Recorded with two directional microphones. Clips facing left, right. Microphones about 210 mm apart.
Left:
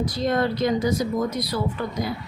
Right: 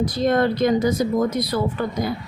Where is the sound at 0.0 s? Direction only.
55° right (ahead or behind).